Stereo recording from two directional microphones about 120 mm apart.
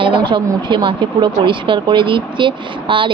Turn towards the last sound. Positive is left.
turn(degrees=-45)  # may be behind; listen again after turning